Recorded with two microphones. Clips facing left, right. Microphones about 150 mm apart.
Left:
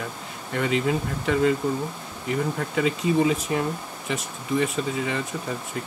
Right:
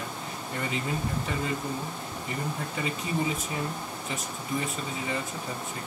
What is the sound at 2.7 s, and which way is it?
Speech, 90° left.